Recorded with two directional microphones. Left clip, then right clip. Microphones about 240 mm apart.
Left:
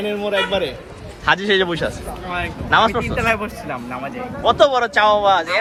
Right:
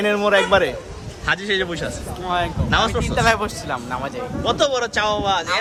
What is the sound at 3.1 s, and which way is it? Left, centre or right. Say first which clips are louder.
Speech: right 2 dB; centre.